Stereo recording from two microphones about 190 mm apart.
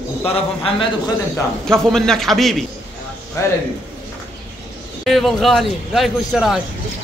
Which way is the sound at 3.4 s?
15° left (ahead or behind).